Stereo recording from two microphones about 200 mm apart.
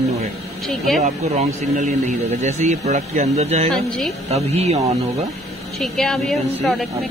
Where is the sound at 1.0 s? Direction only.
30° right (ahead or behind).